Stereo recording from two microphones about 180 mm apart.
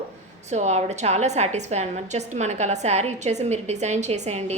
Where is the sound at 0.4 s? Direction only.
40° right (ahead or behind).